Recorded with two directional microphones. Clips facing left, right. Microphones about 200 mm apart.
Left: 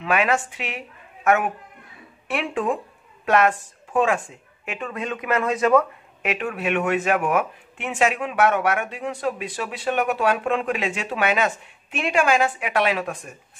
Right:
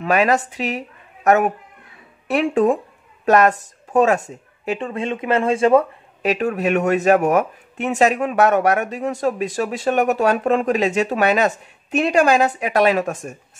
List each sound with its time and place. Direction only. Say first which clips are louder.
0.0 s a woman's voice: right 4 dB; 40° right (ahead or behind)